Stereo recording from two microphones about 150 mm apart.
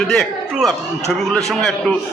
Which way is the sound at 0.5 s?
Centre (ahead or behind).